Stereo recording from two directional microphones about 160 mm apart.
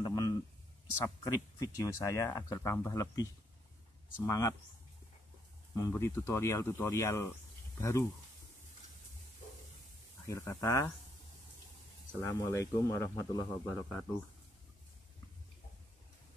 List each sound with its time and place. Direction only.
0.0 s a sound: 25° left (ahead or behind)
1.0 s speech: 25° left (ahead or behind)
4.3 s speech: 20° left (ahead or behind)
5.8 s speech: 20° left (ahead or behind)
10.2 s speech: 15° left (ahead or behind)
12.1 s speech: 15° left (ahead or behind)